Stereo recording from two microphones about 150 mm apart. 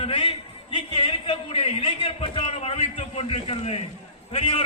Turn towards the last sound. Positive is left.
turn(degrees=40)  # may be behind; listen again after turning